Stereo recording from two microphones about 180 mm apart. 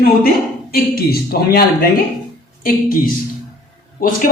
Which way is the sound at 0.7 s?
60° left (ahead or behind).